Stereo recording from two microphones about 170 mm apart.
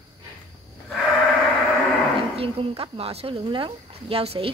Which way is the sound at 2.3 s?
35° right (ahead or behind).